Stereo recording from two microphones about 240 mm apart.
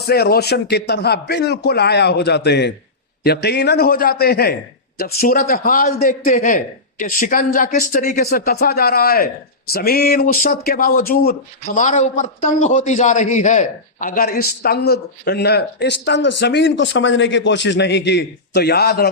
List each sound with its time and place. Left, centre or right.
0.0 s a man's voice: left